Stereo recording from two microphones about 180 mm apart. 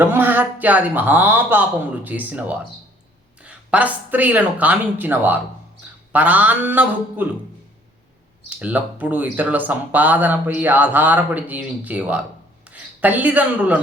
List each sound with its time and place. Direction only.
0.0 s speech: 10° right (ahead or behind)
8.4 s speech: 10° right (ahead or behind)